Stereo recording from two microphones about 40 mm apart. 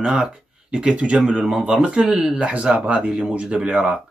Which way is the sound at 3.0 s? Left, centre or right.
Centre.